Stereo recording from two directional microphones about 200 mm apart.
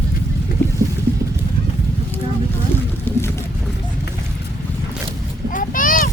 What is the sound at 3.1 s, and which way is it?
Boat, 10° left (ahead or behind).